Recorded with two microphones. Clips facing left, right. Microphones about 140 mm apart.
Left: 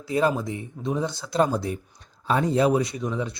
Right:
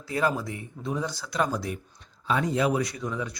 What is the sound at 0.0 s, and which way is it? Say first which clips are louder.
A man's voice: left 4 dB; 20° left (ahead or behind).